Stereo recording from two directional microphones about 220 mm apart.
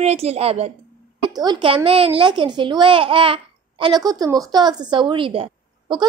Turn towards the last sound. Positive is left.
turn(degrees=-25)  # may be behind; listen again after turning